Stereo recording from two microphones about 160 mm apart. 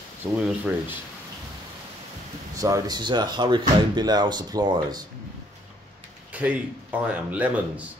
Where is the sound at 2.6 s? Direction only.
20° right (ahead or behind).